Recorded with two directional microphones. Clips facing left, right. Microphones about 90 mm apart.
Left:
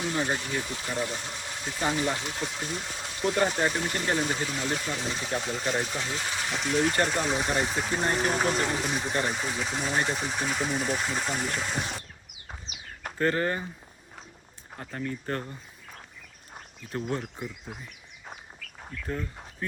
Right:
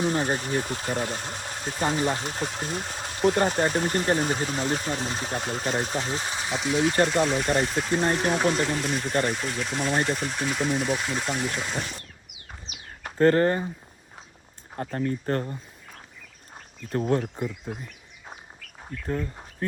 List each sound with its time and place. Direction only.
0.0 s speech: 40° right (ahead or behind)
6.6 s speech: 5° right (ahead or behind)
13.1 s speech: 40° right (ahead or behind)
14.9 s speech: 40° right (ahead or behind)
16.9 s speech: 45° right (ahead or behind)